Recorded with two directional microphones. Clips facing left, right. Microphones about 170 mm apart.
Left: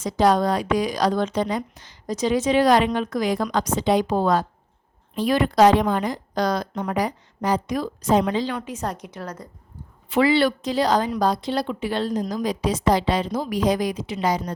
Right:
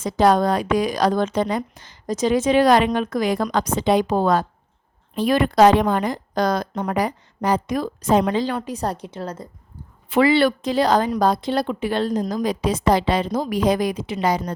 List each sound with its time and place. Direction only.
0.0 s a woman's voice: 55° right (ahead or behind)
8.5 s a woman's voice: 35° right (ahead or behind)
10.1 s a woman's voice: 55° right (ahead or behind)